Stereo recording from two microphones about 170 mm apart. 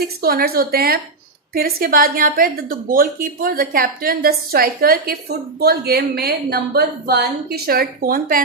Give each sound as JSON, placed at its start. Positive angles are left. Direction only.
{"t": 0.2, "sound": "a woman's voice", "side_deg": -65}